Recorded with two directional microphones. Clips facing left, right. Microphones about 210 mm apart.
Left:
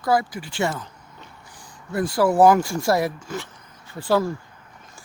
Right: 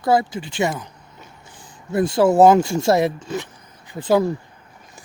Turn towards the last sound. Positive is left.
turn(degrees=-20)  # may be behind; listen again after turning